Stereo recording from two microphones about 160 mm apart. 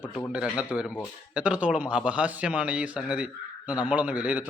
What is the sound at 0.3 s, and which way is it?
A man's voice, 5° right (ahead or behind).